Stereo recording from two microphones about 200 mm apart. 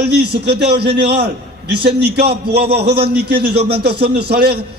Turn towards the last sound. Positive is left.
turn(degrees=-55)  # may be behind; listen again after turning